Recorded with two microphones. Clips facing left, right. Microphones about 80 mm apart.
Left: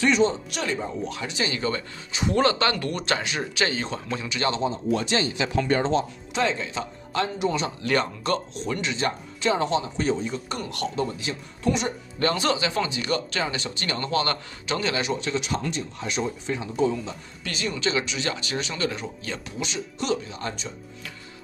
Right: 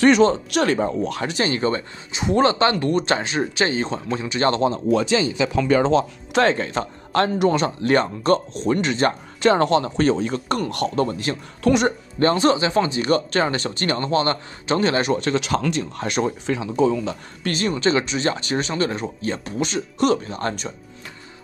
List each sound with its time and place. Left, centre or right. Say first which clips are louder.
0.0 s speech: right 6 dB; right
4.5 s speech: right 6 dB; right
5.9 s speech: right 6 dB; right
7.8 s speech: right 5 dB; right
12.2 s speech: right 6 dB; right
15.4 s speech: right 6 dB; right
17.4 s speech: right 7 dB; right